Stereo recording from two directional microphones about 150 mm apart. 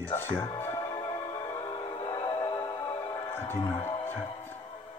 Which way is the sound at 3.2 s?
15° left (ahead or behind).